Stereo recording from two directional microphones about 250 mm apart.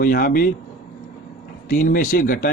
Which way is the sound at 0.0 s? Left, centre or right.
Left.